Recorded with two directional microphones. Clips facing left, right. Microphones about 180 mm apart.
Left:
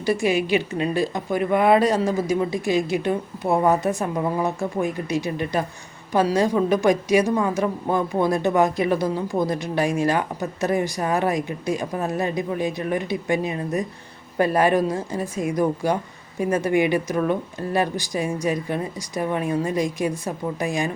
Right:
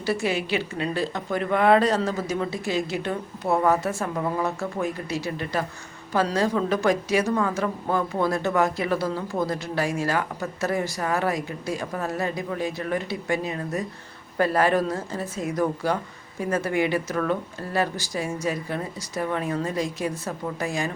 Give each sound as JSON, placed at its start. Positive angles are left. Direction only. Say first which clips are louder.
{"t": 0.0, "sound": "a woman's voice", "louder": "left 4 dB", "side_deg": 15}